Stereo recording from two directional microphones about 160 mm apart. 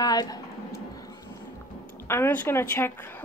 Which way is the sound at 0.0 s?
25° left (ahead or behind).